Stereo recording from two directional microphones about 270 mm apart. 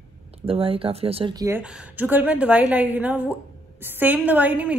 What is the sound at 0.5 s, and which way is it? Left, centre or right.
A woman's voice, right.